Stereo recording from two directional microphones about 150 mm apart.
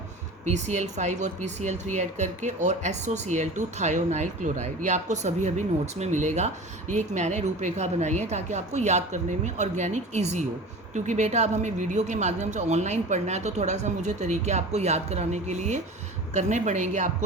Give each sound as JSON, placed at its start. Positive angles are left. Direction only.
{"t": 0.4, "sound": "speech", "side_deg": -50}